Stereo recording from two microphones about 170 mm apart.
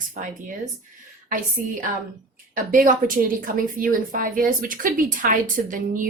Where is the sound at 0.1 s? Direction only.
50° right (ahead or behind).